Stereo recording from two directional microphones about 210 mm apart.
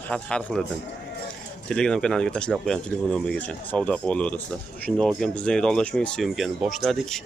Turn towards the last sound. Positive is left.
turn(degrees=0)  # may be behind; listen again after turning